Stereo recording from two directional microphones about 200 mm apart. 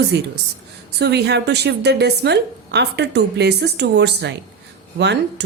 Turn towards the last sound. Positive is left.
turn(degrees=-60)  # may be behind; listen again after turning